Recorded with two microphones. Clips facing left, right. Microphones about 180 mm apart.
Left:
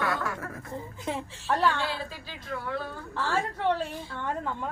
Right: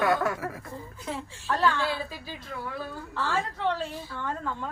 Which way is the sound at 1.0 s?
20° left (ahead or behind).